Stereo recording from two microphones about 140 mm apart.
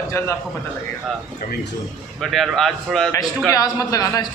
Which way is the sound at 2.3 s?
Centre (ahead or behind).